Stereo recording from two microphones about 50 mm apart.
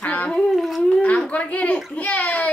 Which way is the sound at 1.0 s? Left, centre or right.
Left.